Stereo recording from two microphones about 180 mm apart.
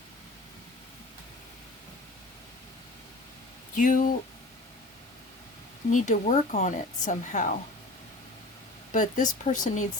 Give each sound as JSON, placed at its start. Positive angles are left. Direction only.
{"t": 3.8, "sound": "a woman's voice", "side_deg": 45}
{"t": 5.9, "sound": "a woman's voice", "side_deg": 45}
{"t": 8.9, "sound": "a woman's voice", "side_deg": 45}